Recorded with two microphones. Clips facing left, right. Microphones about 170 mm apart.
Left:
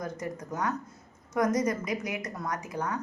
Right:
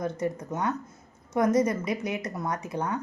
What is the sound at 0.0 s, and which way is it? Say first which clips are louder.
A woman's voice: right 6 dB; 30° right (ahead or behind).